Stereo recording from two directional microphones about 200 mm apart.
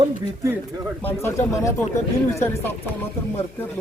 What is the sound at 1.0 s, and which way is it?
Speech, 10° left (ahead or behind).